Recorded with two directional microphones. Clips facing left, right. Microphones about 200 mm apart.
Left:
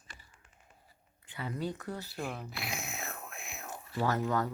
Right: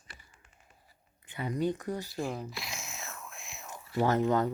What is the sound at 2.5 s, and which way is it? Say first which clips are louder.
Whispering: left 2 dB; 60° left (ahead or behind).